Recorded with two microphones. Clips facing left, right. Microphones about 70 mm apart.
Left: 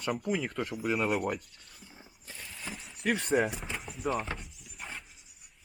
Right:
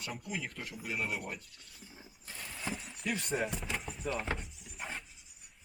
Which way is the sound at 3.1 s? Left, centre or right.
Left.